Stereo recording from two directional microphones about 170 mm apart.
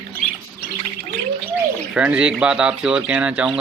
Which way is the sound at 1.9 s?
10° right (ahead or behind).